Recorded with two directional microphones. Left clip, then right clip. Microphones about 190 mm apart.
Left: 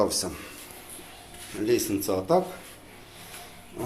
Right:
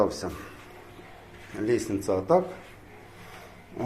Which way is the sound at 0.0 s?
5° left (ahead or behind).